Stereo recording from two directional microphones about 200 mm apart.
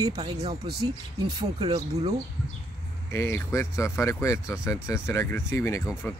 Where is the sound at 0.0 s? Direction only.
20° right (ahead or behind).